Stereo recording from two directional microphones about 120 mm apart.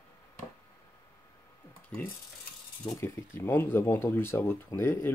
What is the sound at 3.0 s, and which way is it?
Speech, 20° left (ahead or behind).